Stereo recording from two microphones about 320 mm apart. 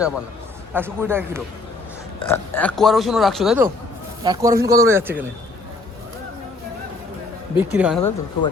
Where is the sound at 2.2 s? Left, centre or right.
Centre.